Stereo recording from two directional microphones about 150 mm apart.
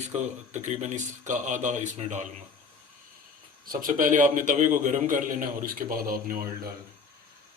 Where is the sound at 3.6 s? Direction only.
65° right (ahead or behind).